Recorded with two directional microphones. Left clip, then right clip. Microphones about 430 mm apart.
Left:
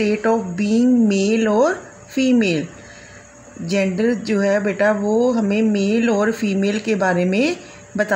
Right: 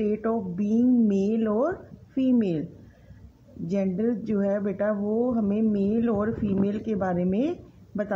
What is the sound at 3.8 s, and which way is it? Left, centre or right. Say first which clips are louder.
Speech: left 8 dB; right.